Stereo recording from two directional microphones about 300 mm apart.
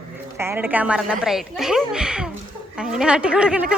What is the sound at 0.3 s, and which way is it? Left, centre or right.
A woman's voice, centre.